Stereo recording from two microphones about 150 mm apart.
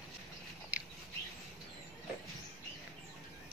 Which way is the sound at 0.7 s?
10° right (ahead or behind).